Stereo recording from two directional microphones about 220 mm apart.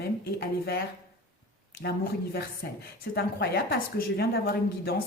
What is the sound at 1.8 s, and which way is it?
Speech, 45° left (ahead or behind).